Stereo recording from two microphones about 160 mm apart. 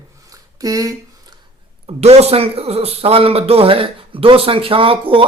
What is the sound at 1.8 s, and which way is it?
Speech, 40° right (ahead or behind).